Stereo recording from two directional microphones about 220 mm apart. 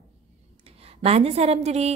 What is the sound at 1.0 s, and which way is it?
Speech, 30° right (ahead or behind).